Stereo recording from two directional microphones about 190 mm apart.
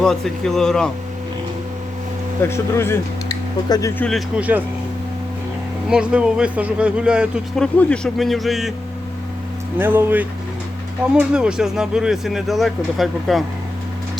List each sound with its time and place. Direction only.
0.0 s speech: 5° left (ahead or behind)
2.4 s speech: 15° left (ahead or behind)
4.0 s speech: 5° right (ahead or behind)
5.9 s speech: 5° right (ahead or behind)
9.7 s speech: 10° right (ahead or behind)